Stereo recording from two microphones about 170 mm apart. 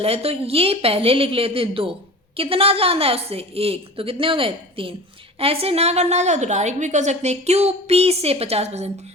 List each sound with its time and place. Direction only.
0.0 s a woman's voice: 35° right (ahead or behind)